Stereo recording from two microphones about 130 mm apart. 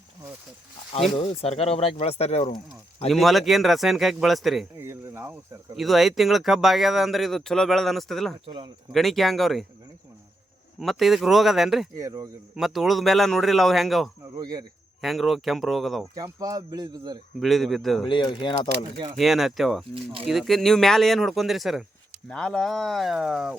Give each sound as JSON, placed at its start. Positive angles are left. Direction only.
{"t": 1.1, "sound": "speech", "side_deg": 45}
{"t": 3.1, "sound": "speech", "side_deg": 0}
{"t": 4.8, "sound": "speech", "side_deg": -20}
{"t": 5.7, "sound": "speech", "side_deg": 0}
{"t": 10.8, "sound": "speech", "side_deg": 0}
{"t": 11.9, "sound": "speech", "side_deg": -25}
{"t": 12.5, "sound": "speech", "side_deg": 0}
{"t": 14.3, "sound": "speech", "side_deg": -30}
{"t": 15.0, "sound": "speech", "side_deg": 0}
{"t": 16.1, "sound": "speech", "side_deg": -25}
{"t": 17.4, "sound": "speech", "side_deg": 0}
{"t": 18.0, "sound": "speech", "side_deg": 35}
{"t": 19.1, "sound": "speech", "side_deg": 0}